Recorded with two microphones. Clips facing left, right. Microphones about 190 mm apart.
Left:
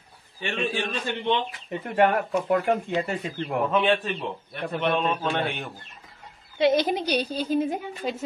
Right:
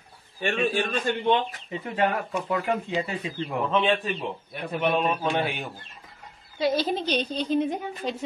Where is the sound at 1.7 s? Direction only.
55° left (ahead or behind).